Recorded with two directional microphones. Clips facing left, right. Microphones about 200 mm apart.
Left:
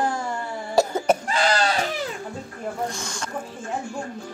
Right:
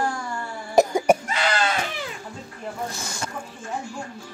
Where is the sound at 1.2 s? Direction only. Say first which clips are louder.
Left 2 dB; 35° left (ahead or behind).